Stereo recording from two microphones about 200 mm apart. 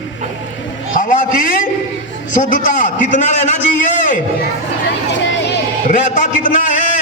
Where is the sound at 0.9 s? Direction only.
40° left (ahead or behind).